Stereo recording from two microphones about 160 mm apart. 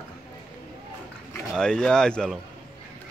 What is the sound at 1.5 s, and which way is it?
Speech, 5° left (ahead or behind).